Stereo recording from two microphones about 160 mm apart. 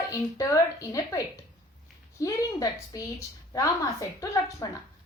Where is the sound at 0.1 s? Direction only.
20° left (ahead or behind).